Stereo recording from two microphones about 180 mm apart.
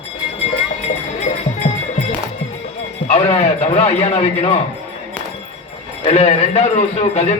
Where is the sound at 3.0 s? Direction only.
35° left (ahead or behind).